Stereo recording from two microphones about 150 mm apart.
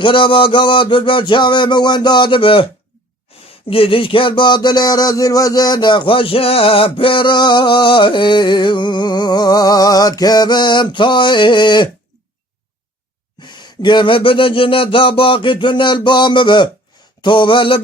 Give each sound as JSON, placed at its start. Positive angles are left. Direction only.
{"t": 0.0, "sound": "speech", "side_deg": 35}
{"t": 3.3, "sound": "a sound", "side_deg": 40}
{"t": 3.7, "sound": "speech", "side_deg": 35}
{"t": 13.4, "sound": "speech", "side_deg": 30}